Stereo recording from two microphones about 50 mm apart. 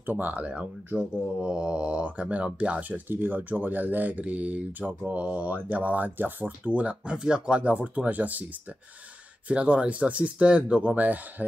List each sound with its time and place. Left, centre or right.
0.0 s speech: right
1.4 s speech: centre
3.1 s speech: right
9.5 s speech: right